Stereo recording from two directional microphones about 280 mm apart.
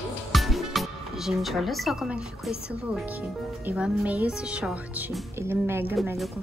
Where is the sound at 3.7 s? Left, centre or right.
Centre.